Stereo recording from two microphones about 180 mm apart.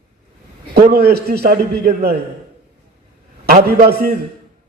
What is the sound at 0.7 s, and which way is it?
A man's voice, 60° right (ahead or behind).